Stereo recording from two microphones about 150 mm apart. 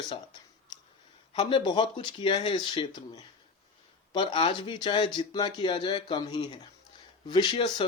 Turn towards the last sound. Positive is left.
turn(degrees=30)  # may be behind; listen again after turning